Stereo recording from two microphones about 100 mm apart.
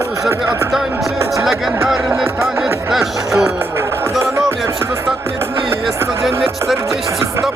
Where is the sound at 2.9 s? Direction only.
5° right (ahead or behind).